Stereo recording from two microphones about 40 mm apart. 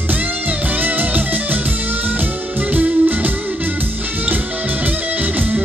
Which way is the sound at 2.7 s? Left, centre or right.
Right.